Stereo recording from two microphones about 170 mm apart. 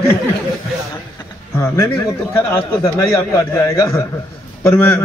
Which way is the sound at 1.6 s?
15° left (ahead or behind).